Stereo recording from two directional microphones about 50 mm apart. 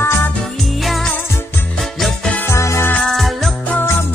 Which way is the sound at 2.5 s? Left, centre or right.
Left.